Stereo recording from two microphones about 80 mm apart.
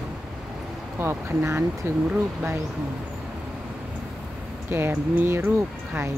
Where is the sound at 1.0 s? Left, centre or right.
Right.